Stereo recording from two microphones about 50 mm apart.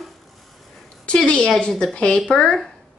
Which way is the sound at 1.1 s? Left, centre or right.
Left.